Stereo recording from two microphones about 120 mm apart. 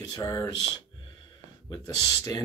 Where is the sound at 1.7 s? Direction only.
30° left (ahead or behind).